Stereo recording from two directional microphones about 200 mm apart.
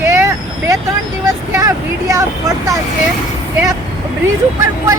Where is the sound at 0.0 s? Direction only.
15° right (ahead or behind).